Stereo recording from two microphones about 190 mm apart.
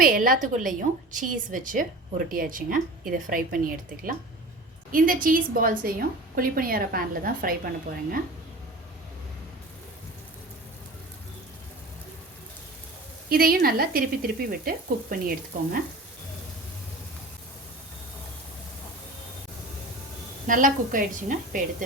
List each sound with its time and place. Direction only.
0.0 s a woman's voice: 45° right (ahead or behind)
13.3 s a woman's voice: 50° right (ahead or behind)
20.5 s a woman's voice: 45° right (ahead or behind)